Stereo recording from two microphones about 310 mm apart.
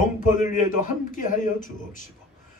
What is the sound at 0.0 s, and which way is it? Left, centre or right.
A man's voice, left.